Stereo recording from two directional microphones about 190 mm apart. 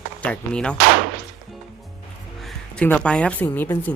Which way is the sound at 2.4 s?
5° left (ahead or behind).